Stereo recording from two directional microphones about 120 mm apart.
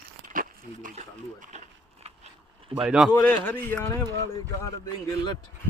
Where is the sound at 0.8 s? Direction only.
85° right.